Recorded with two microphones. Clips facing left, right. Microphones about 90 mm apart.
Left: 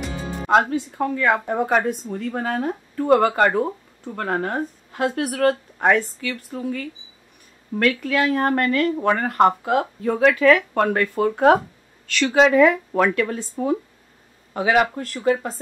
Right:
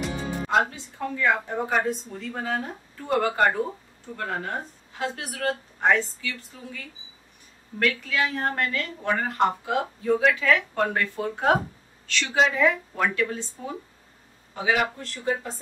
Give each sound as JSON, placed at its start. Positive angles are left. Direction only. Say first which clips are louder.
{"t": 0.5, "sound": "speech", "louder": "left 7 dB", "side_deg": 55}
{"t": 7.8, "sound": "speech", "louder": "left 5 dB", "side_deg": 55}